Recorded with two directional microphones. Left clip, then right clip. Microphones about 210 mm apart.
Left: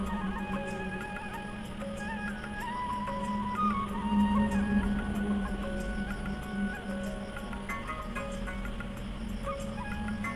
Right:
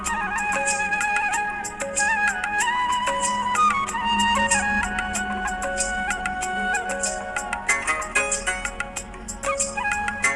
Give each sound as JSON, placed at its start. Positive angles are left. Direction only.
{"t": 0.1, "sound": "music", "side_deg": -50}
{"t": 7.7, "sound": "music", "side_deg": -50}